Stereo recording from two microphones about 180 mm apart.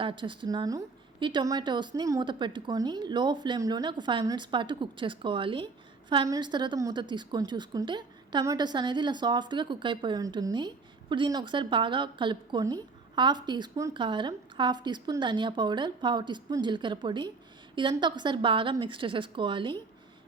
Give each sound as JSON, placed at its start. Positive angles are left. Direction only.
{"t": 0.0, "sound": "a woman's voice", "side_deg": -30}